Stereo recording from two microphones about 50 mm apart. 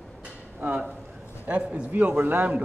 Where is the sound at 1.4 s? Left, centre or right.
Right.